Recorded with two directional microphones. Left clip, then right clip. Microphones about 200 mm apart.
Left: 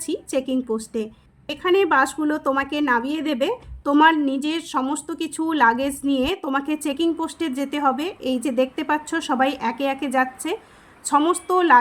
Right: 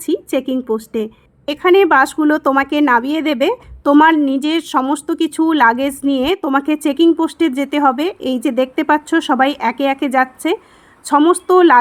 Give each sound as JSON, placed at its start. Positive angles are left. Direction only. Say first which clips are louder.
{"t": 0.3, "sound": "a woman's voice", "louder": "right 1 dB", "side_deg": -45}